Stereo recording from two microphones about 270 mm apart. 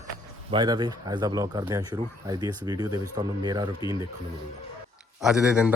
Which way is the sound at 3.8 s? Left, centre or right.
Centre.